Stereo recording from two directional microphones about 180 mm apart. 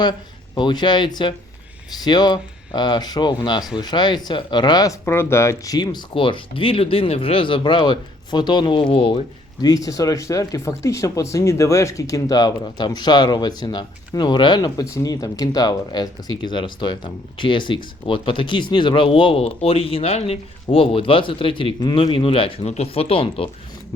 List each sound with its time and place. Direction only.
0.0 s speech: 25° left (ahead or behind)